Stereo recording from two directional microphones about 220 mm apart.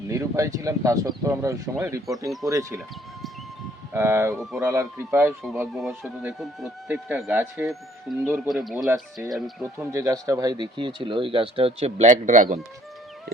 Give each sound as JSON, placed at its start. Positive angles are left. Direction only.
{"t": 0.1, "sound": "speech", "side_deg": -15}
{"t": 3.9, "sound": "speech", "side_deg": -10}
{"t": 9.7, "sound": "speech", "side_deg": -15}